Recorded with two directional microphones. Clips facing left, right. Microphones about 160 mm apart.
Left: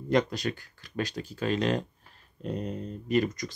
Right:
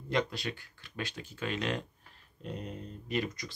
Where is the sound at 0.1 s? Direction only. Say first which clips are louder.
Left 6 dB; 45° left (ahead or behind).